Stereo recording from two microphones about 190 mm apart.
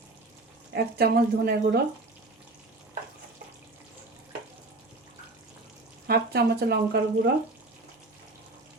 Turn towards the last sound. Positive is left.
turn(degrees=-55)  # may be behind; listen again after turning